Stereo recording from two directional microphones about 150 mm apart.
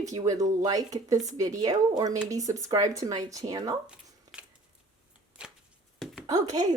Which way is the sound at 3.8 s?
5° right (ahead or behind).